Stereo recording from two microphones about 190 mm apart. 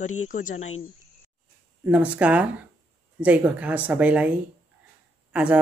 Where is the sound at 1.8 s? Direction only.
10° right (ahead or behind).